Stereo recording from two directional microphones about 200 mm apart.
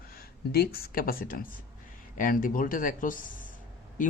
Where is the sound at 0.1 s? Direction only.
50° left (ahead or behind).